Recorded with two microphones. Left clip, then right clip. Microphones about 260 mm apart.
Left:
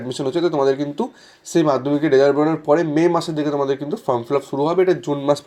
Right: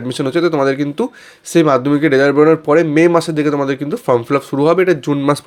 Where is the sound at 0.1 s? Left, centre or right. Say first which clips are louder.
Right 5 dB; right.